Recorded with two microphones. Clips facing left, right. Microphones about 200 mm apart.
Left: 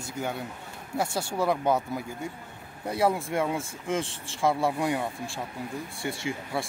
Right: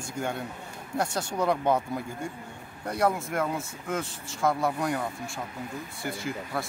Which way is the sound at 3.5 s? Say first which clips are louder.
Left 2 dB; 25° left (ahead or behind).